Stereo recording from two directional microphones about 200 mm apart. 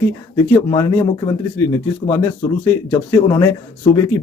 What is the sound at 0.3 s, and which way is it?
Speech, 15° left (ahead or behind).